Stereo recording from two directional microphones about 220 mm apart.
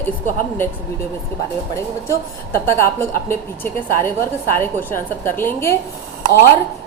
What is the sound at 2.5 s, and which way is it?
A woman's voice, 10° left (ahead or behind).